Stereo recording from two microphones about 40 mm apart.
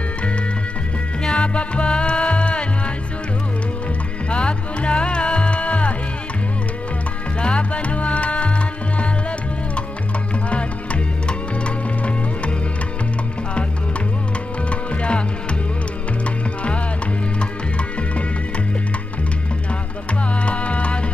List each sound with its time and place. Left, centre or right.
1.2 s music: left
4.3 s music: left
7.3 s music: left
10.5 s music: left
14.7 s music: left
17.4 s music: left
20.4 s music: left